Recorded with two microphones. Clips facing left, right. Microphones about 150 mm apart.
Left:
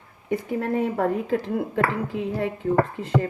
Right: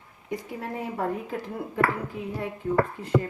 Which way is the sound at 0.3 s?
65° left (ahead or behind).